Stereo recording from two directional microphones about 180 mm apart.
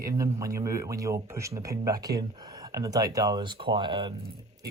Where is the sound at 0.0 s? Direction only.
20° right (ahead or behind).